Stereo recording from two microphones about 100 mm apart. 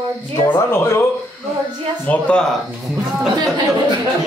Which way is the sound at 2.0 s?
15° left (ahead or behind).